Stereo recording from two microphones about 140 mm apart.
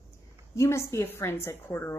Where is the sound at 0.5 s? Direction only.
20° left (ahead or behind).